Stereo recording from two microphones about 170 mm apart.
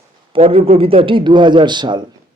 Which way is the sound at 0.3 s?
35° right (ahead or behind).